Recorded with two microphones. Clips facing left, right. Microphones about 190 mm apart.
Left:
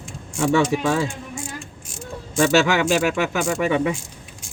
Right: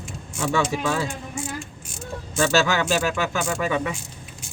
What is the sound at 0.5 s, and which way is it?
Speech, 25° left (ahead or behind).